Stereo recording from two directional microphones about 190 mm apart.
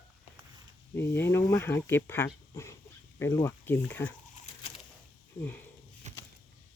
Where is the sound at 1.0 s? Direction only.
15° left (ahead or behind).